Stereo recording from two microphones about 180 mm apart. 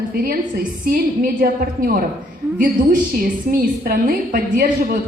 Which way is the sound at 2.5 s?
50° right (ahead or behind).